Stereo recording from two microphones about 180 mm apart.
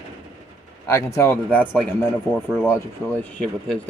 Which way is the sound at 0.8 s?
15° left (ahead or behind).